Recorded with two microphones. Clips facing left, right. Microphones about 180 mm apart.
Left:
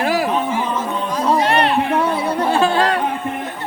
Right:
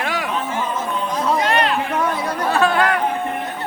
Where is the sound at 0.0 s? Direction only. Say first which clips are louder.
Left 6 dB; 35° left (ahead or behind).